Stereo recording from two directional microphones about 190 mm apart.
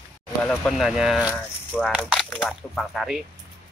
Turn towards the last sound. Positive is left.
turn(degrees=0)  # may be behind; listen again after turning